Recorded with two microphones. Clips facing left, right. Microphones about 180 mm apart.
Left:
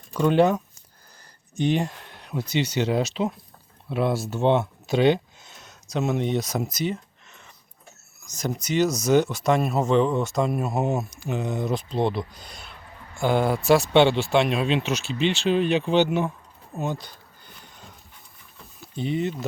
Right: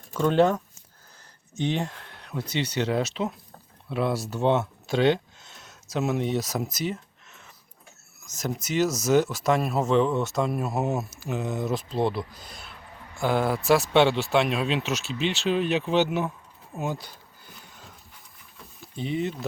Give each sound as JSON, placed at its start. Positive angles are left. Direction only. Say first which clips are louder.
{"t": 0.1, "sound": "speech", "louder": "left 2 dB", "side_deg": 10}
{"t": 2.4, "sound": "speech", "louder": "left 4 dB", "side_deg": -30}
{"t": 2.7, "sound": "speech", "louder": "left 1 dB", "side_deg": 5}
{"t": 4.6, "sound": "a sound", "louder": "left 2 dB", "side_deg": 5}
{"t": 8.2, "sound": "speech", "louder": "left 2 dB", "side_deg": 0}
{"t": 18.9, "sound": "speech", "louder": "left 2 dB", "side_deg": 0}